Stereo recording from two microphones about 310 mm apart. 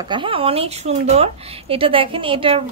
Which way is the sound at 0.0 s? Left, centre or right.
Centre.